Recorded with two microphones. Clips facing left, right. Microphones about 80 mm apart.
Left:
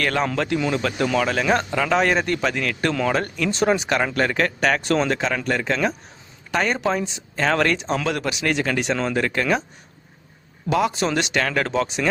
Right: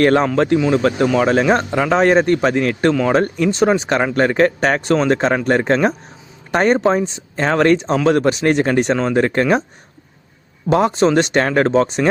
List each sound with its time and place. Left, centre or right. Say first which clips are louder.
0.0 s a man's voice: right 9 dB; right
1.0 s speech: right 3 dB; centre
1.3 s a man's voice: right 6 dB; right
9.0 s a man's voice: right 7 dB; right
10.7 s speech: right 7 dB; right